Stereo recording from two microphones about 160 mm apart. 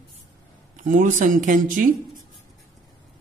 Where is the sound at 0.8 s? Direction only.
55° right (ahead or behind).